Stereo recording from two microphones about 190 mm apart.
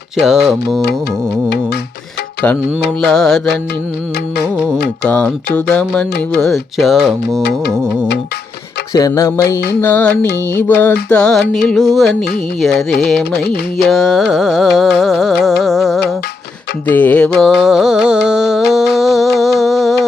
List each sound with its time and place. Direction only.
0.2 s carnatic music: centre (ahead or behind)
3.0 s carnatic music: 5° left (ahead or behind)
5.0 s a sound: 5° left (ahead or behind)
5.5 s carnatic music: 5° left (ahead or behind)
8.9 s a sound: 20° left (ahead or behind)
11.1 s carnatic music: 5° left (ahead or behind)
16.8 s music: 10° left (ahead or behind)